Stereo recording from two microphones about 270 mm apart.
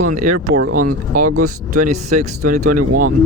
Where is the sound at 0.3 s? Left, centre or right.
Right.